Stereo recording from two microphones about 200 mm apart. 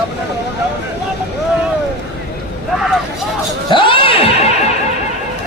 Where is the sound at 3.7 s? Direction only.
25° left (ahead or behind).